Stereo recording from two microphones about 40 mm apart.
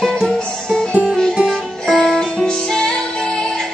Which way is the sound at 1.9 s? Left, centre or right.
Centre.